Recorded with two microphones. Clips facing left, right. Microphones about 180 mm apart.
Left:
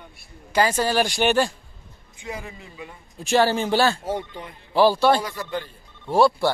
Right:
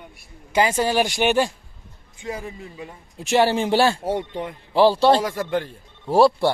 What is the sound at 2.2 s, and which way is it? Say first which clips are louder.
Speech: right 4 dB; 35° right (ahead or behind).